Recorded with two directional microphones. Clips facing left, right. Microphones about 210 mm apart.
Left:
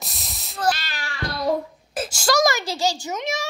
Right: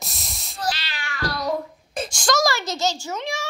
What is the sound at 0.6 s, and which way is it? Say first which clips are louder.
Cat: left 4 dB; 50° left (ahead or behind).